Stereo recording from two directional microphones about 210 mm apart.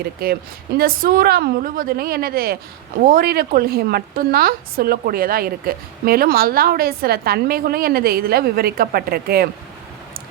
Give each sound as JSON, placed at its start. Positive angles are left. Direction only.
{"t": 0.8, "sound": "a woman's voice", "side_deg": -45}